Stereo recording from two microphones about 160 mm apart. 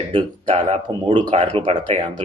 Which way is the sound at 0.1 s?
30° right (ahead or behind).